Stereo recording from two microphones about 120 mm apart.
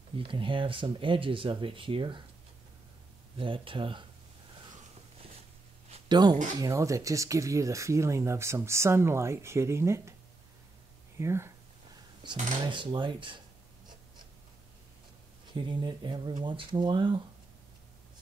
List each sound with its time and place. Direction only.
0.2 s speech: 45° right (ahead or behind)
3.3 s speech: 45° right (ahead or behind)
6.0 s speech: 35° right (ahead or behind)
6.6 s speech: 25° right (ahead or behind)
11.1 s a sound: 25° right (ahead or behind)
12.6 s speech: 40° right (ahead or behind)
15.5 s speech: 40° right (ahead or behind)